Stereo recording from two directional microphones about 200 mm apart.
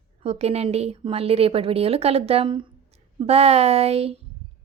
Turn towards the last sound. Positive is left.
turn(degrees=-30)  # may be behind; listen again after turning